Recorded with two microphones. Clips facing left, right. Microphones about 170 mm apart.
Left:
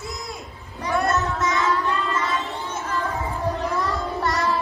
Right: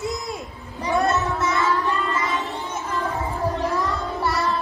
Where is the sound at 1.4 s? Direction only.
Centre (ahead or behind).